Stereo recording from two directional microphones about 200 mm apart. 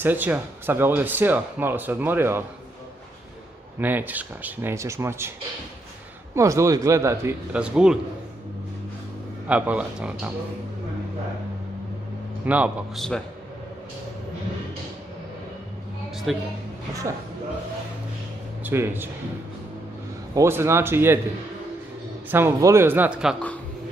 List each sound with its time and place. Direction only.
0.0 s speech: 10° right (ahead or behind)
3.8 s speech: 10° right (ahead or behind)
6.3 s speech: 15° right (ahead or behind)
9.5 s speech: 5° right (ahead or behind)
12.4 s a man's voice: 5° right (ahead or behind)
16.3 s a man's voice: centre (ahead or behind)
18.6 s a man's voice: 10° right (ahead or behind)
20.3 s speech: 15° right (ahead or behind)
22.3 s speech: 15° right (ahead or behind)